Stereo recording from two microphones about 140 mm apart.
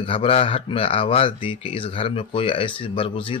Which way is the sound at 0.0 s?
40° left (ahead or behind).